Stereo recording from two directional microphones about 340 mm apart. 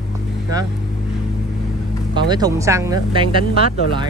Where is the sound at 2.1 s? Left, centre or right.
Centre.